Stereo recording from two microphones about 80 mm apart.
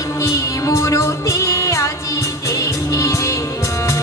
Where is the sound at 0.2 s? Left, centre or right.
Left.